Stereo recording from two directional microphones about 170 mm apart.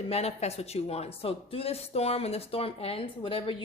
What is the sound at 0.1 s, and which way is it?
Speech, 40° left (ahead or behind).